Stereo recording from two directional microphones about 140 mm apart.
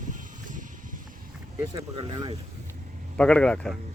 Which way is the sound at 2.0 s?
30° right (ahead or behind).